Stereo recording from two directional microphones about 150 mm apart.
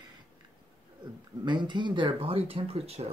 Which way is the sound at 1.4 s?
30° right (ahead or behind).